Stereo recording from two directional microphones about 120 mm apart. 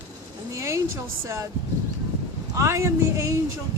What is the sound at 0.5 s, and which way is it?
Speech, 25° right (ahead or behind).